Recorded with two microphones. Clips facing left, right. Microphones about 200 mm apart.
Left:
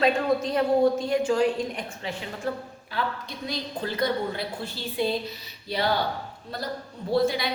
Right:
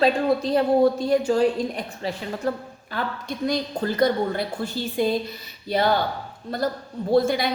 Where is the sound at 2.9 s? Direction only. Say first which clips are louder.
Right 3 dB; 50° right (ahead or behind).